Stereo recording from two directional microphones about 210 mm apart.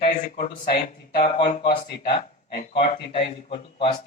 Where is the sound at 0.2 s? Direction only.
35° left (ahead or behind).